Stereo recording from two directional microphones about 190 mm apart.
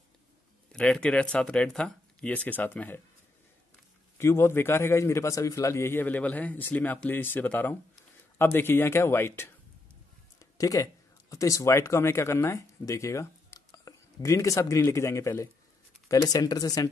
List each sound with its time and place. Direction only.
0.7 s speech: 5° left (ahead or behind)
4.2 s a man's voice: 15° left (ahead or behind)